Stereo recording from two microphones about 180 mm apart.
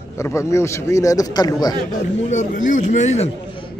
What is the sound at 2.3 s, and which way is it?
A man's voice, 45° left (ahead or behind).